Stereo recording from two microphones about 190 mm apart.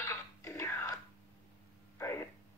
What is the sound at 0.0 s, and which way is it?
Music, 15° left (ahead or behind).